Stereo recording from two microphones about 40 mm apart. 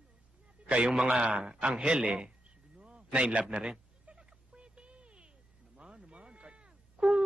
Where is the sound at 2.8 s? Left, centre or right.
Right.